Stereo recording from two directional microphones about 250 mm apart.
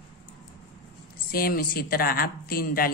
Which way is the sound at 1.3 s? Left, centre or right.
Left.